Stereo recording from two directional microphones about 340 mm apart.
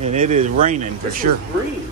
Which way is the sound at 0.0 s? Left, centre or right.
Centre.